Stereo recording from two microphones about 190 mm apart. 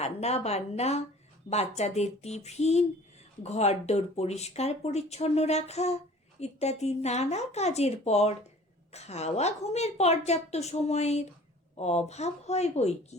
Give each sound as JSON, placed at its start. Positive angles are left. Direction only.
{"t": 0.0, "sound": "speech", "side_deg": 35}